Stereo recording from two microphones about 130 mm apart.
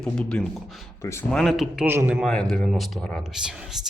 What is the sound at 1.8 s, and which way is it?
Speech, 15° right (ahead or behind).